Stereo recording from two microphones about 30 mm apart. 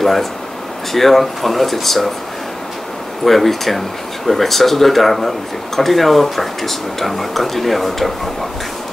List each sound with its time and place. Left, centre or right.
0.0 s speech: centre
3.3 s speech: centre